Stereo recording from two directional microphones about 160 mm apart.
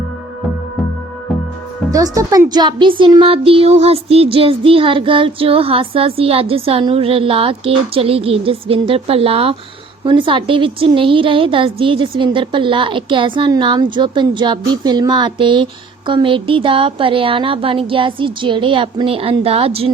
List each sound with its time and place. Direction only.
1.9 s a woman's voice: 20° right (ahead or behind)